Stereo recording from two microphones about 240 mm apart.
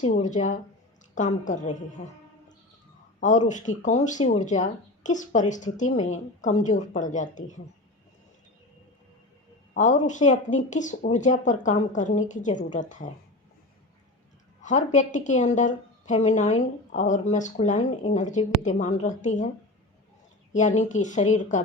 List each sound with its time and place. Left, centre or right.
0.0 s a woman's voice: left
3.2 s a woman's voice: left
9.7 s a woman's voice: left
14.6 s a woman's voice: left
20.5 s a woman's voice: left